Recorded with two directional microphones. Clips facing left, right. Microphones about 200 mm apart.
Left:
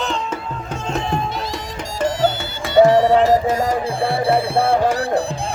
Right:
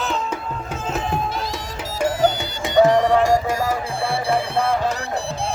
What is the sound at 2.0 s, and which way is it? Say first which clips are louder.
Music: even; 10° right (ahead or behind).